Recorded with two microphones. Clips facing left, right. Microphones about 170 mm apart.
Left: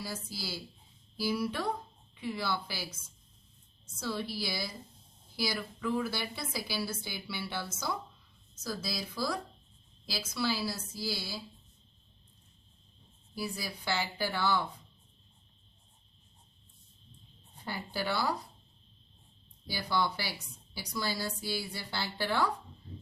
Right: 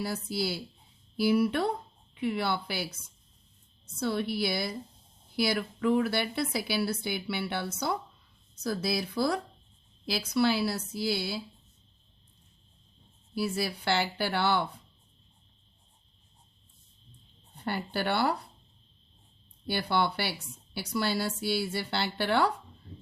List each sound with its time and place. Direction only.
0.0 s a woman's voice: 60° right (ahead or behind)
4.0 s a woman's voice: 60° right (ahead or behind)
13.3 s a woman's voice: 70° right (ahead or behind)
17.7 s a woman's voice: 65° right (ahead or behind)
19.6 s a woman's voice: 65° right (ahead or behind)